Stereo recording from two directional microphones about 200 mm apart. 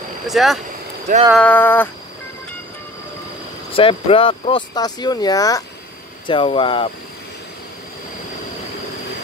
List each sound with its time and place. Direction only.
0.3 s speech: centre (ahead or behind)
1.3 s a sound: 10° left (ahead or behind)
3.7 s speech: 25° left (ahead or behind)